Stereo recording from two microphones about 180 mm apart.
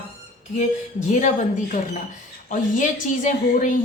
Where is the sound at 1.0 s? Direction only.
40° left (ahead or behind).